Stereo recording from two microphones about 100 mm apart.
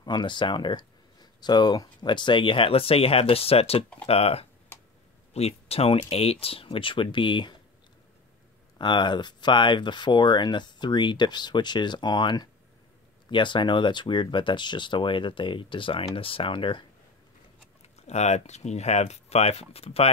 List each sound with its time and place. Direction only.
0.0 s speech: 50° left (ahead or behind)
8.7 s speech: 50° left (ahead or behind)
17.9 s speech: 90° left